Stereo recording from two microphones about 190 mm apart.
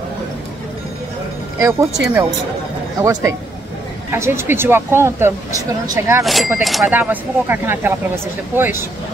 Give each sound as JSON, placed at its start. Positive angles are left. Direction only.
{"t": 1.6, "sound": "speech", "side_deg": -15}
{"t": 6.2, "sound": "speech", "side_deg": 0}